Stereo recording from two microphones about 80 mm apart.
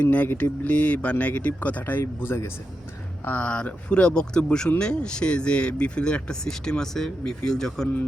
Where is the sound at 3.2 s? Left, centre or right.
Centre.